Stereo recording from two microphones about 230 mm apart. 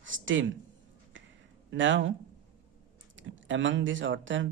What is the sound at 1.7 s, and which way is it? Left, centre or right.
Speech, right.